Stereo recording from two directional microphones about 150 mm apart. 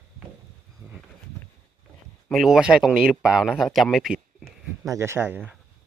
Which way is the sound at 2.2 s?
Centre (ahead or behind).